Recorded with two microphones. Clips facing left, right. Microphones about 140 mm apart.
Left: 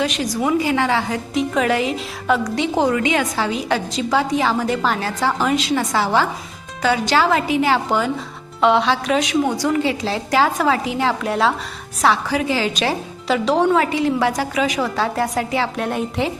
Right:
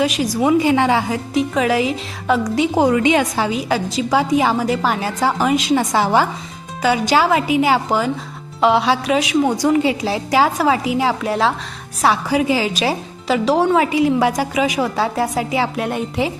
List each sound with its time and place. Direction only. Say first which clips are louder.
0.4 s a woman's voice: right 4 dB; 20° right (ahead or behind)
1.1 s a woman's voice: right 2 dB; centre (ahead or behind)
2.9 s a woman's voice: right 4 dB; 20° right (ahead or behind)
3.5 s speech: right 2 dB; 5° right (ahead or behind)
12.0 s speech: right 2 dB; 10° right (ahead or behind)